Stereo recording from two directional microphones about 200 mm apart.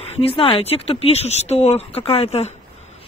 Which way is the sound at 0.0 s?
30° left (ahead or behind).